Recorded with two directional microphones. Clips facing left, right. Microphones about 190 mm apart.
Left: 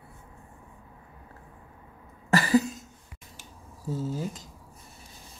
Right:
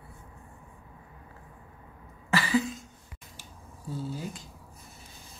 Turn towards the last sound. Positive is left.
turn(degrees=40)  # may be behind; listen again after turning